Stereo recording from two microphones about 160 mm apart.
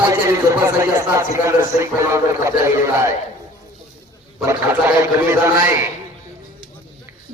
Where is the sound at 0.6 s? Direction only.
15° right (ahead or behind).